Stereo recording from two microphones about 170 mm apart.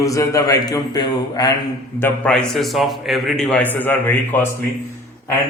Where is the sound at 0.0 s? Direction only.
20° left (ahead or behind).